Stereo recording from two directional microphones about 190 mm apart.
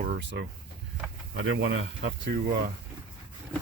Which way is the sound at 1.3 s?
80° right.